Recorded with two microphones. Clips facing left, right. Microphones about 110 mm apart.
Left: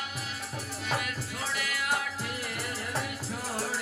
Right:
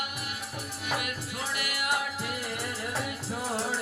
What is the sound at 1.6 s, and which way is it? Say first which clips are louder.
Music: right 1 dB; 15° right (ahead or behind).